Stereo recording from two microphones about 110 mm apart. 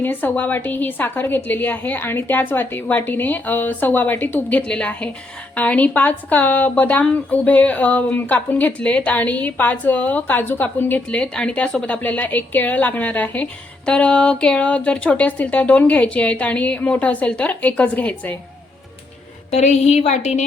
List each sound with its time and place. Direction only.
0.0 s a woman's voice: 15° left (ahead or behind)
19.5 s a woman's voice: 90° left